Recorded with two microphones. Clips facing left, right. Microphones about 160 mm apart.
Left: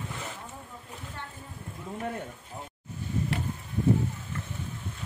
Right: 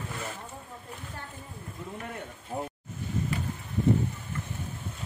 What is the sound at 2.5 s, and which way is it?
Vehicle, 60° right (ahead or behind).